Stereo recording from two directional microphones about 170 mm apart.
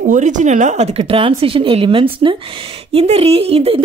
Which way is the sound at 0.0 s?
50° right (ahead or behind).